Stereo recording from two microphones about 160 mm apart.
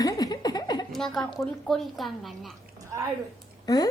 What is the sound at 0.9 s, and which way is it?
A woman's voice, centre (ahead or behind).